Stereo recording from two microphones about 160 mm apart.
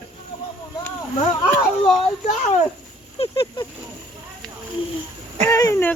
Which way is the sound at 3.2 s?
35° left (ahead or behind).